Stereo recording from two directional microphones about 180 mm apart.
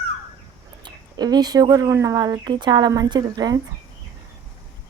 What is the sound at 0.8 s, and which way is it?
Speech, 25° right (ahead or behind).